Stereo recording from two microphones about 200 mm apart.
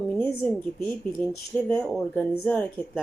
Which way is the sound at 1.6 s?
5° left (ahead or behind).